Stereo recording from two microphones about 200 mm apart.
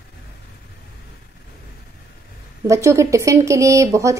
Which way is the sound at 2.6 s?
15° right (ahead or behind).